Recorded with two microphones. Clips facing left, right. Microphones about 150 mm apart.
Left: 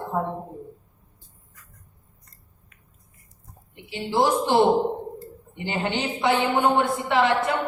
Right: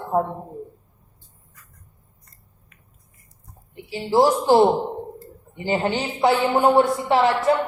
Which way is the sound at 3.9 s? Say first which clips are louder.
Right 4 dB; 40° right (ahead or behind).